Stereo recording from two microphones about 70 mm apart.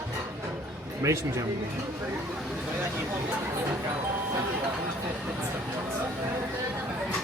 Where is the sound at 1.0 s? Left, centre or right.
Right.